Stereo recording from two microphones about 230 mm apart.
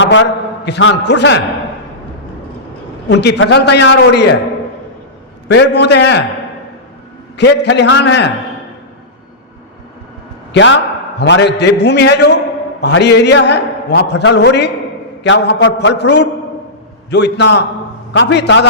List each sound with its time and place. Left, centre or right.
0.0 s a man's voice: left
3.1 s a man's voice: left
5.5 s a man's voice: left
7.3 s a man's voice: left
10.5 s a man's voice: left